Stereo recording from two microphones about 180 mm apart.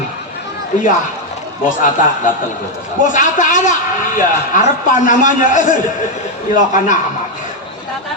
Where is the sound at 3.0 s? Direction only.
45° left (ahead or behind).